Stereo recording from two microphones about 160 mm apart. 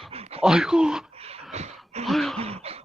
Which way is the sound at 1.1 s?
40° right (ahead or behind).